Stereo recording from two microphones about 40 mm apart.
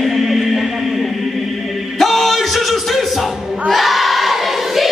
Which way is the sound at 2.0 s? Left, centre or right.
Centre.